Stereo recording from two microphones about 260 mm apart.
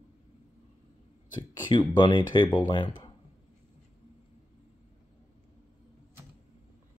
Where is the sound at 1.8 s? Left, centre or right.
Centre.